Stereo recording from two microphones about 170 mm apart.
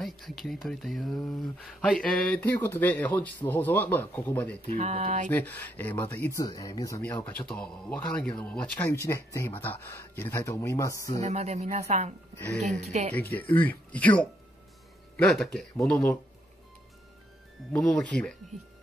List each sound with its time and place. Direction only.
0.0 s speech: centre (ahead or behind)
4.6 s speech: 40° right (ahead or behind)
5.3 s speech: 10° left (ahead or behind)
6.4 s speech: 20° left (ahead or behind)
7.0 s speech: 10° left (ahead or behind)
11.2 s speech: 40° right (ahead or behind)
13.1 s speech: 10° left (ahead or behind)
17.7 s speech: 5° left (ahead or behind)